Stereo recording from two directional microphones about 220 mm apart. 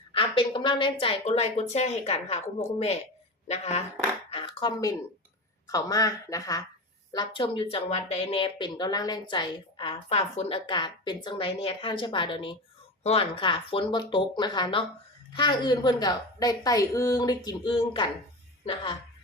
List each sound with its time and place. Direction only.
0.1 s speech: 25° left (ahead or behind)
4.3 s a sound: 25° left (ahead or behind)
5.6 s speech: 15° left (ahead or behind)